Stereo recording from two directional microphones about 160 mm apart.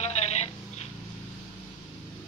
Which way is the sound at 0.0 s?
45° left (ahead or behind).